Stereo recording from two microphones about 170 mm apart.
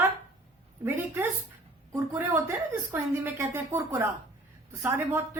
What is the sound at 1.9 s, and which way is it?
A woman's voice, 15° right (ahead or behind).